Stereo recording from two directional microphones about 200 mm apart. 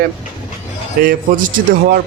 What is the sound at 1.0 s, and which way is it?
Speech, 45° right (ahead or behind).